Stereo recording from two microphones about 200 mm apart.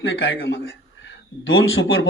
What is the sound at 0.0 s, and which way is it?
A man's voice, 75° left (ahead or behind).